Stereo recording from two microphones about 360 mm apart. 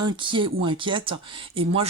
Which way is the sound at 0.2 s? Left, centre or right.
Centre.